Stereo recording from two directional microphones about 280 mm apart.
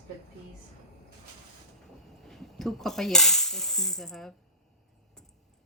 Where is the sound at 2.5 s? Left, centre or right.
Centre.